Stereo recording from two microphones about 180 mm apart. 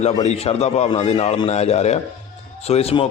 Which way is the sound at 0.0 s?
40° left (ahead or behind).